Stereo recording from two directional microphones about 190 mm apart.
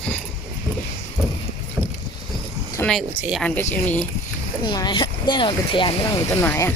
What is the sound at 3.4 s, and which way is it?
Speech, 10° left (ahead or behind).